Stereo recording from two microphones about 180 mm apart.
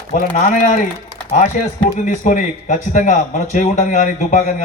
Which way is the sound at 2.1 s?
45° left (ahead or behind).